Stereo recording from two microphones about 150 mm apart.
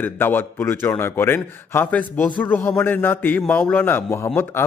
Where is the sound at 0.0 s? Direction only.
15° left (ahead or behind).